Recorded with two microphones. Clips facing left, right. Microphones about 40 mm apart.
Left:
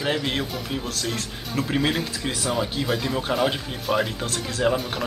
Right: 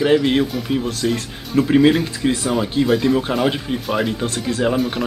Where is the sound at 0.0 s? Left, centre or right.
Centre.